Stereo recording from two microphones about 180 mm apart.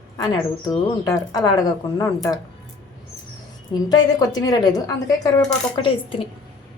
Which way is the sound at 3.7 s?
20° left (ahead or behind).